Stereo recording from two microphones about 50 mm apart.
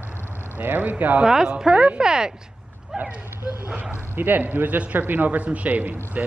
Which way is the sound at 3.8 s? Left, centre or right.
Right.